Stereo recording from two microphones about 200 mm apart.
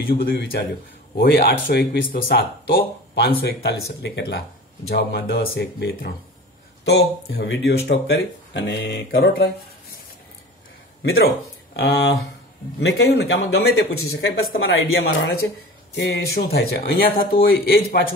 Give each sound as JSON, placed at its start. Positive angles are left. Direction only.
{"t": 0.2, "sound": "speech", "side_deg": 50}
{"t": 11.0, "sound": "speech", "side_deg": 55}
{"t": 14.7, "sound": "speech", "side_deg": 80}
{"t": 15.9, "sound": "speech", "side_deg": 55}